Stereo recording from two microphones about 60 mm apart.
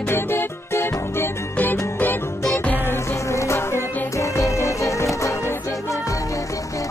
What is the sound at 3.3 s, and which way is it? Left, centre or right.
Music, left.